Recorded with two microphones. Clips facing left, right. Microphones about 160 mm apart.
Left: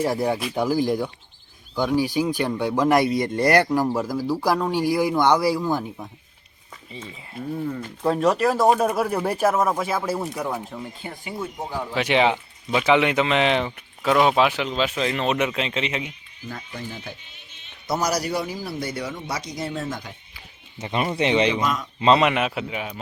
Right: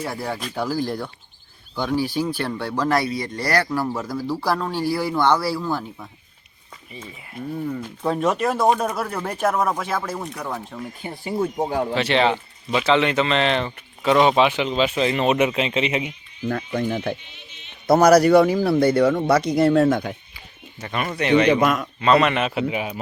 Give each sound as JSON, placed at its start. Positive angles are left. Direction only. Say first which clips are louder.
{"t": 0.0, "sound": "speech", "louder": "left 5 dB", "side_deg": 20}
{"t": 7.0, "sound": "speech", "louder": "even", "side_deg": 0}
{"t": 11.2, "sound": "speech", "louder": "right 9 dB", "side_deg": -40}
{"t": 11.9, "sound": "speech", "louder": "left 2 dB", "side_deg": 15}
{"t": 16.5, "sound": "a man's voice", "louder": "right 11 dB", "side_deg": -60}
{"t": 20.7, "sound": "speech", "louder": "left 2 dB", "side_deg": 25}
{"t": 21.5, "sound": "a man's voice", "louder": "right 6 dB", "side_deg": -60}
{"t": 22.0, "sound": "speech", "louder": "even", "side_deg": 25}
{"t": 22.3, "sound": "speech", "louder": "right 1 dB", "side_deg": 5}
{"t": 22.7, "sound": "speech", "louder": "right 4 dB", "side_deg": -5}